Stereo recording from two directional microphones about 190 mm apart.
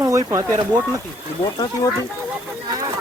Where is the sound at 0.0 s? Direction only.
15° right (ahead or behind).